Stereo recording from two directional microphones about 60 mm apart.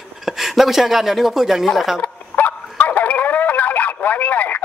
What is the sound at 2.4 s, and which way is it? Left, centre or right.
Bow-wow, left.